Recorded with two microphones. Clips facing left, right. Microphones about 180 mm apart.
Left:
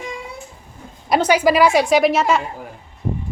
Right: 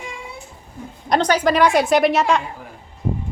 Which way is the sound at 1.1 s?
10° left (ahead or behind).